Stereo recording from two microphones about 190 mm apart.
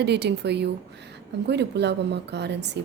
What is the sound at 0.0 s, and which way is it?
A woman's voice, 60° right (ahead or behind).